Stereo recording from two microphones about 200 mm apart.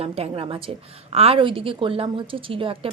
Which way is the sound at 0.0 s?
30° right (ahead or behind).